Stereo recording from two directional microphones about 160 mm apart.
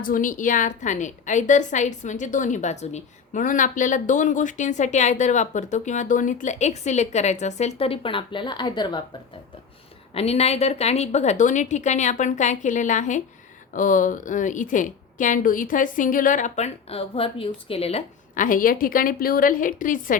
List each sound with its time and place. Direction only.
0.0 s a woman's voice: 55° left (ahead or behind); by 9.0 s 25° left (ahead or behind)
10.2 s a woman's voice: 40° left (ahead or behind)
18.3 s a woman's voice: 60° left (ahead or behind)